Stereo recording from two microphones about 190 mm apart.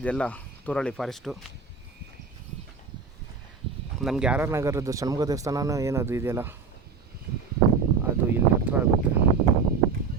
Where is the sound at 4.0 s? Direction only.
5° right (ahead or behind).